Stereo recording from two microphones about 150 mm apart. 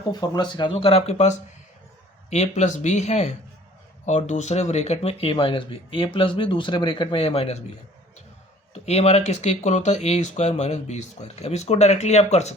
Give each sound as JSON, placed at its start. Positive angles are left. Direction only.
{"t": 0.1, "sound": "speech", "side_deg": 30}
{"t": 8.7, "sound": "speech", "side_deg": 45}